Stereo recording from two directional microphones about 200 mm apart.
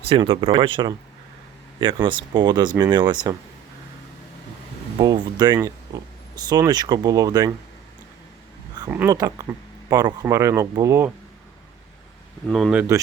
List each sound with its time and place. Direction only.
0.1 s speech: 25° right (ahead or behind)
4.9 s speech: 20° right (ahead or behind)
8.9 s speech: 15° right (ahead or behind)
12.5 s speech: centre (ahead or behind)